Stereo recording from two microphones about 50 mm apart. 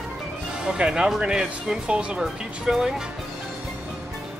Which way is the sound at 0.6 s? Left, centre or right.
Centre.